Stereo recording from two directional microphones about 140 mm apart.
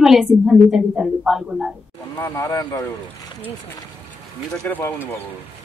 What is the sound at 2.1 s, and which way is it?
Speech, 20° left (ahead or behind).